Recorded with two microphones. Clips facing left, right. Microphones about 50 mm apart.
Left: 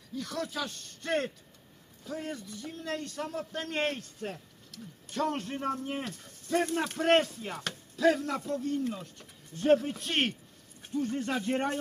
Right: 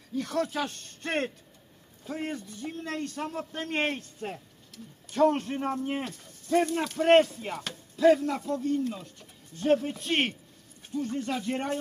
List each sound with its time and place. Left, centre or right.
0.1 s a man's voice: right
4.2 s speech: centre
6.9 s speech: centre
10.9 s speech: centre